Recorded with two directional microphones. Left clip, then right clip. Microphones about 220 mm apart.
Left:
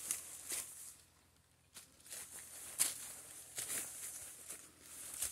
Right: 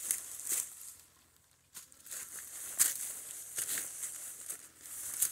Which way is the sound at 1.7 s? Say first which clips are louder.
Right 5 dB; 50° right (ahead or behind).